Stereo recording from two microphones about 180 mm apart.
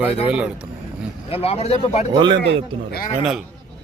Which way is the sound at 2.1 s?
25° right (ahead or behind).